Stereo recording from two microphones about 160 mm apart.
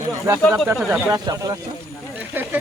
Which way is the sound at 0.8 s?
5° right (ahead or behind).